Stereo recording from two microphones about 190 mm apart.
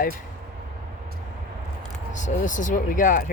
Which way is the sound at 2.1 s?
40° left (ahead or behind).